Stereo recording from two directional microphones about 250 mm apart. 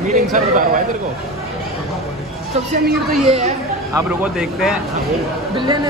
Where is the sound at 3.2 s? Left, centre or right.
Right.